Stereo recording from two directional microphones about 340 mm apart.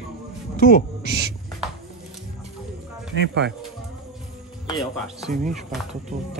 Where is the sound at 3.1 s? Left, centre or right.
Right.